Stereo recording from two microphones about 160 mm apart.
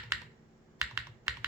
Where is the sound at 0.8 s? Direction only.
20° right (ahead or behind).